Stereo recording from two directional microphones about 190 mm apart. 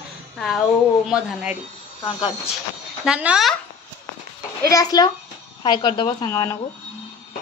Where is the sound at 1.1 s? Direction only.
5° right (ahead or behind).